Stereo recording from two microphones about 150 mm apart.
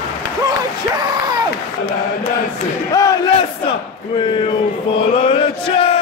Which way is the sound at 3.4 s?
35° left (ahead or behind).